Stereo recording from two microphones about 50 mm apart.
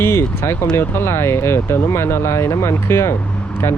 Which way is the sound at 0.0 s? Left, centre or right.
Left.